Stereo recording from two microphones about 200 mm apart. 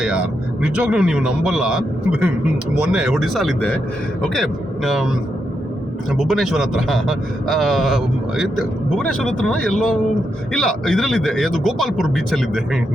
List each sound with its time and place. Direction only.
0.0 s a man's voice: 5° right (ahead or behind)